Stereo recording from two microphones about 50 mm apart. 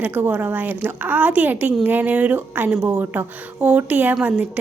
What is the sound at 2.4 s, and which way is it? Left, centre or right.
Speech, right.